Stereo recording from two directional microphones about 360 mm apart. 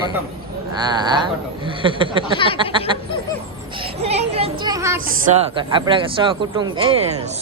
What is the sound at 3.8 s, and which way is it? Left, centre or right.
Speech, centre.